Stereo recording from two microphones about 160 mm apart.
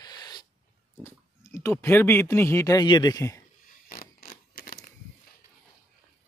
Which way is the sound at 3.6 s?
60° left (ahead or behind).